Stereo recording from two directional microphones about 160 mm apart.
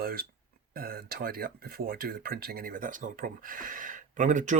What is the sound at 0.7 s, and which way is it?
Speech, 70° right (ahead or behind).